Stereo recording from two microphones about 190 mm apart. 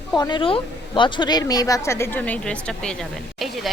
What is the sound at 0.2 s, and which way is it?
A woman's voice, 25° left (ahead or behind).